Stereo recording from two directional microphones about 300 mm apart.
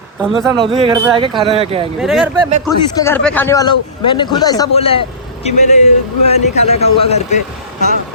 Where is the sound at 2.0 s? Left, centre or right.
Centre; by 6.8 s left.